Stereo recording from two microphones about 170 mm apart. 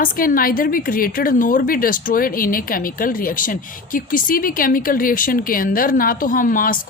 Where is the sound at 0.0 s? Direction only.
55° left (ahead or behind).